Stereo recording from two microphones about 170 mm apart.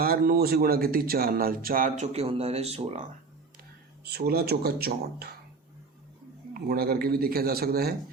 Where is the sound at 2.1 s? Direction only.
35° right (ahead or behind).